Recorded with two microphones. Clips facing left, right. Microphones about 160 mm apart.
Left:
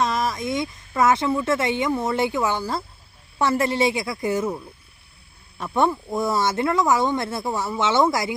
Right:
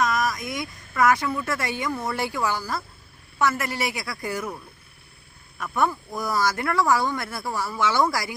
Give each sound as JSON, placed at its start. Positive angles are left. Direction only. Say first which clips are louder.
{"t": 0.0, "sound": "speech", "louder": "left 1 dB", "side_deg": 30}
{"t": 5.5, "sound": "speech", "louder": "left 3 dB", "side_deg": 25}